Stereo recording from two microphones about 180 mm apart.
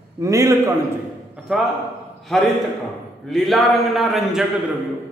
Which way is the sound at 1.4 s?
5° right (ahead or behind).